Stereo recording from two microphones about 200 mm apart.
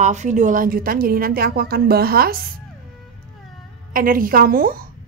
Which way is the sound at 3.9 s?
45° right (ahead or behind).